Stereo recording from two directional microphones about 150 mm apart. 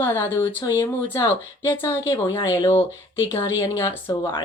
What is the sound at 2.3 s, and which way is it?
Speech, 20° left (ahead or behind).